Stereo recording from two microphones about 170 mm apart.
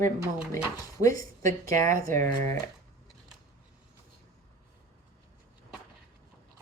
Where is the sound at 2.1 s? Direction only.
50° right (ahead or behind).